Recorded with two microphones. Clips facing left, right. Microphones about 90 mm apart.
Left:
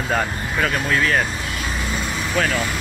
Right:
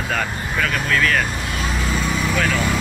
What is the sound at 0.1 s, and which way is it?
Speech, 30° left (ahead or behind).